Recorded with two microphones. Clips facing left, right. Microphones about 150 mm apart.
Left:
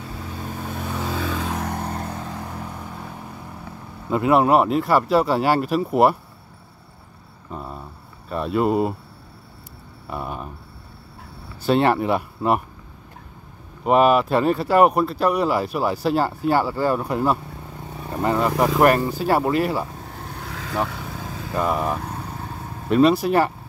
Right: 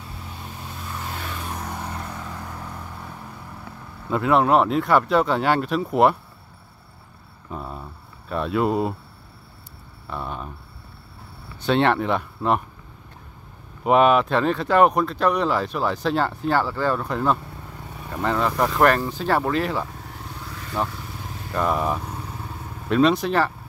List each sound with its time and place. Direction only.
0.6 s vehicle: 60° left (ahead or behind); by 1.9 s 80° left
2.0 s vehicle: 40° left (ahead or behind)
4.1 s speech: 5° left (ahead or behind)
7.5 s a sound: centre (ahead or behind)
10.0 s speech: 5° left (ahead or behind)
11.6 s speech: 5° left (ahead or behind)
13.8 s speech: 5° left (ahead or behind)
20.2 s vehicle: 70° left (ahead or behind)
21.5 s speech: centre (ahead or behind)